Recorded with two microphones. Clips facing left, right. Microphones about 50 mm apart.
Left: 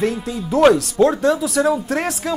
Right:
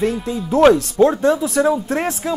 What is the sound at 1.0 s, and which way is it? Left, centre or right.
Speech, right.